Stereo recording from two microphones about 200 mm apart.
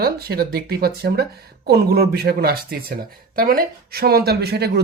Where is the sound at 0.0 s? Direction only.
50° right (ahead or behind).